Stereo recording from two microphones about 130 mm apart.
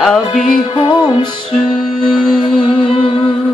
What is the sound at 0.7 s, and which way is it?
Music, 40° left (ahead or behind).